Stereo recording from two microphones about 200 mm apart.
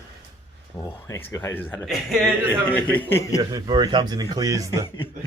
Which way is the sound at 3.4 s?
20° right (ahead or behind).